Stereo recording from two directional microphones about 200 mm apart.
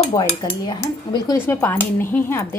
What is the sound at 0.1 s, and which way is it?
Dishes, 20° left (ahead or behind).